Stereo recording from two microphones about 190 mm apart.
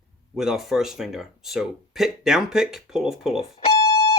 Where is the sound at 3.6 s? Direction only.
30° left (ahead or behind).